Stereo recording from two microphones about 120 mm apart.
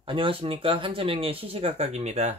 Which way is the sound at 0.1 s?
45° right (ahead or behind).